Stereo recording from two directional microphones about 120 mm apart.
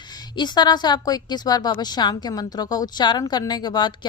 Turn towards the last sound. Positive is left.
turn(degrees=35)  # may be behind; listen again after turning